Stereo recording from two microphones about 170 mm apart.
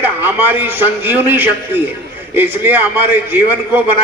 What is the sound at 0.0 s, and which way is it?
A man's voice, 10° right (ahead or behind).